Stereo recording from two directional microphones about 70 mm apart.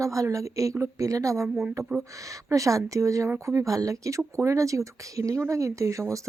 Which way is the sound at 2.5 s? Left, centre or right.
Right.